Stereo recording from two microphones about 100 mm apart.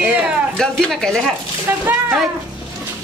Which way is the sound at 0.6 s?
5° left (ahead or behind).